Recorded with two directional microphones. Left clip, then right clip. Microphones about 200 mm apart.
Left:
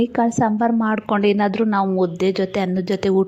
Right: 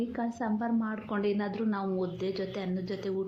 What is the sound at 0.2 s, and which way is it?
A woman's voice, 45° left (ahead or behind).